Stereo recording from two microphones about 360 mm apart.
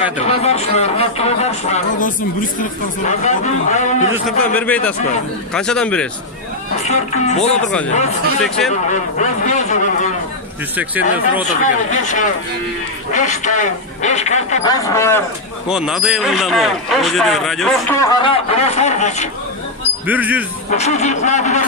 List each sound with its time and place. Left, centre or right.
0.2 s speech: centre
4.6 s a man's voice: centre
6.9 s speech: centre
8.4 s a man's voice: centre
9.2 s speech: centre
10.8 s a man's voice: centre
11.6 s a man's voice: left
20.1 s a man's voice: centre
20.7 s speech: centre